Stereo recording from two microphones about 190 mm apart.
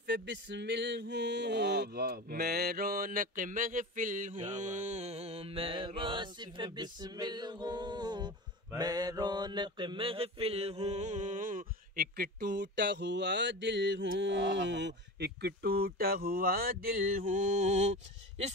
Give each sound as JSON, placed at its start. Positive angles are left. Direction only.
{"t": 0.0, "sound": "a sound", "side_deg": -65}
{"t": 4.5, "sound": "mantra", "side_deg": -40}
{"t": 18.4, "sound": "speech", "side_deg": -35}